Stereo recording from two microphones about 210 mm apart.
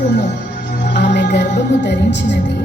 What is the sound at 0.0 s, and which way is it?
Music, 55° left (ahead or behind).